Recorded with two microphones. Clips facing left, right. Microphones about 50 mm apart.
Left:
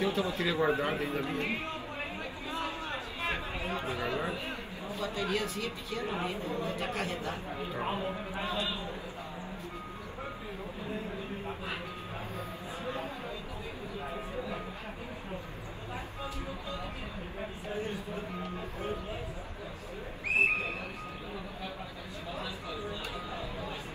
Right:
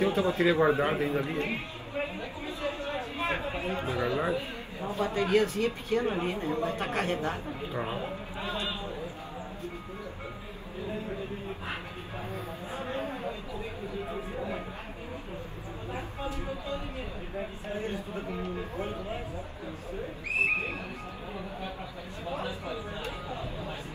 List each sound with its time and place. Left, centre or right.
0.0 s a man's voice: right
3.2 s chatter: right
4.8 s a man's voice: right
12.7 s a sound: right
17.7 s speech: right
22.3 s a sound: right